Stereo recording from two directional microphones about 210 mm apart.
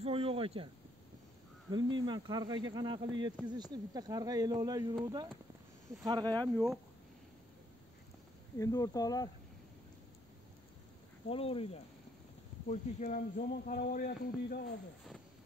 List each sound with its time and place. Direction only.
0.0 s a sound: 25° right (ahead or behind)
1.7 s speech: 20° right (ahead or behind)
6.3 s speech: 5° left (ahead or behind)
8.5 s speech: 15° left (ahead or behind)
11.2 s speech: 25° left (ahead or behind)
12.6 s speech: 40° left (ahead or behind)